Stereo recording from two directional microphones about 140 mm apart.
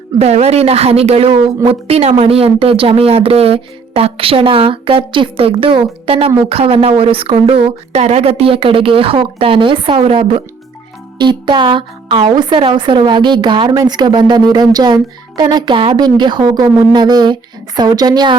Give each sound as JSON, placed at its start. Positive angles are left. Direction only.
{"t": 0.2, "sound": "a woman's voice", "side_deg": -50}